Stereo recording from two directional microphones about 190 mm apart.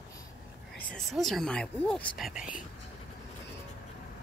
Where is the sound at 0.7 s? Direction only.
Centre (ahead or behind).